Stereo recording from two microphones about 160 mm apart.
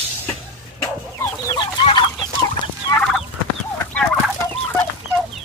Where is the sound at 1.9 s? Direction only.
25° left (ahead or behind).